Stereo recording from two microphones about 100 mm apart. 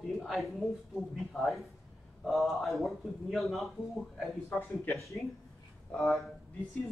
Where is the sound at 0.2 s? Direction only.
Centre (ahead or behind).